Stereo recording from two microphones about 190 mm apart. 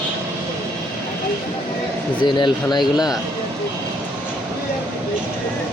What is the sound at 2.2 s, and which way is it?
Speech, 25° left (ahead or behind).